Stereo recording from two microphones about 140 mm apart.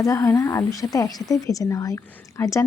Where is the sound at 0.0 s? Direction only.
25° left (ahead or behind).